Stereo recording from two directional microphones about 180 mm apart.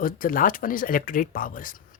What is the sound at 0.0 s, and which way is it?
Speech, 50° left (ahead or behind).